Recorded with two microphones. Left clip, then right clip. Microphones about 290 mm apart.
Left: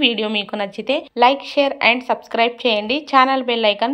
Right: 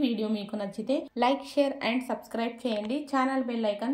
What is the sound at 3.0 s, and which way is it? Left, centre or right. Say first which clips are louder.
Speech: left 15 dB; left.